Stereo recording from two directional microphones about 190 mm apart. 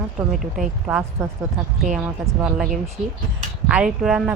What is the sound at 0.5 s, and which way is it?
Speech, 5° right (ahead or behind).